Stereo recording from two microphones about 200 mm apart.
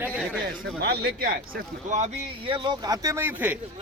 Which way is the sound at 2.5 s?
20° right (ahead or behind).